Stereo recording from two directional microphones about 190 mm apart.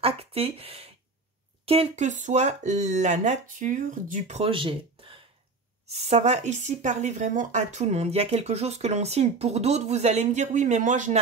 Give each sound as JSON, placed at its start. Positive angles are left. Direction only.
{"t": 0.0, "sound": "a sound", "side_deg": -30}
{"t": 1.7, "sound": "speech", "side_deg": -30}
{"t": 4.4, "sound": "speech", "side_deg": -25}